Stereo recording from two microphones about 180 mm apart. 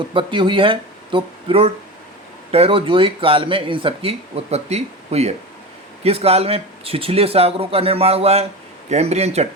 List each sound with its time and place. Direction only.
0.1 s speech: 30° right (ahead or behind)